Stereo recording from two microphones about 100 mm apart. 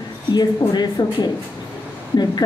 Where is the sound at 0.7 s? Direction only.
45° left (ahead or behind).